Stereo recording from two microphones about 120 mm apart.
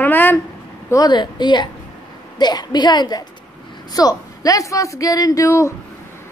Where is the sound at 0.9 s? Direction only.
35° left (ahead or behind).